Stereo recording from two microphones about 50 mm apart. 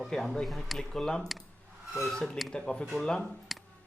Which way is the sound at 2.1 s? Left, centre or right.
Centre.